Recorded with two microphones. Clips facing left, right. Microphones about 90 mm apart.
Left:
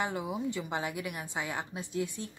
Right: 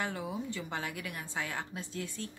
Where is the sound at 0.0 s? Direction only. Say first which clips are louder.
Left 3 dB; 20° left (ahead or behind).